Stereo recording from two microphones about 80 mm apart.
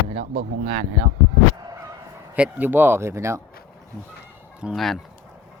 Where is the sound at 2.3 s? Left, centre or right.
Centre; by 3.4 s right.